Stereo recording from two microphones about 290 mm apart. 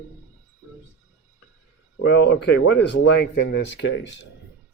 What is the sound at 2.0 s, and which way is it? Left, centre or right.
Speech, left.